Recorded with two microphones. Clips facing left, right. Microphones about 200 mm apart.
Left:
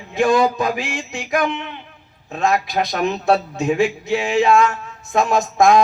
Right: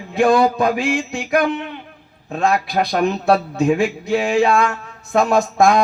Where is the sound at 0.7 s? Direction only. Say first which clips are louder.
Right 5 dB; 40° right (ahead or behind).